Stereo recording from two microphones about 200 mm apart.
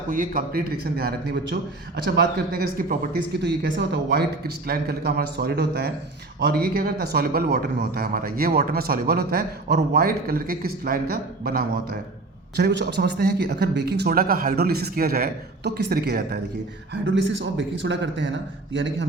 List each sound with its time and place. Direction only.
0.1 s speech: 45° right (ahead or behind)
3.4 s speech: 60° right (ahead or behind)
16.9 s a man's voice: 65° right (ahead or behind)